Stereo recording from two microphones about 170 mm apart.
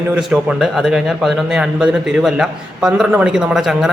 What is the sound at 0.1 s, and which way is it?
A man's voice, 5° right (ahead or behind).